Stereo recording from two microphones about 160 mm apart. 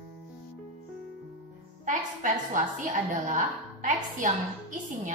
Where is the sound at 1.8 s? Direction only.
55° right (ahead or behind).